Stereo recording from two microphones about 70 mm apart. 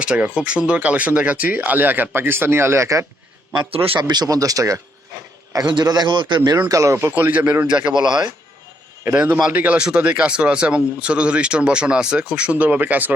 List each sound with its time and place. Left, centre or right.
0.0 s speech: centre; by 3.1 s right
3.5 s a man's voice: right
4.3 s a man's voice: right
6.7 s speech: right
7.1 s speech: right
9.5 s speech: right